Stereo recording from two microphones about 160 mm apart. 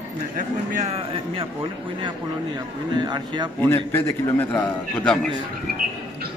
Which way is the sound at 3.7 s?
15° left (ahead or behind).